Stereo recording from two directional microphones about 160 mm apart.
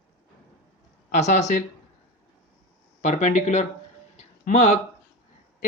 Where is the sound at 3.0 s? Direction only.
45° left (ahead or behind).